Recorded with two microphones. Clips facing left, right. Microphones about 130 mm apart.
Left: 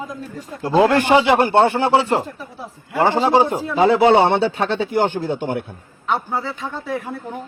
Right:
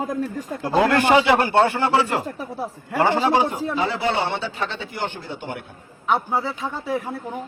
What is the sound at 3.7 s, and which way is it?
Speech, 50° left (ahead or behind).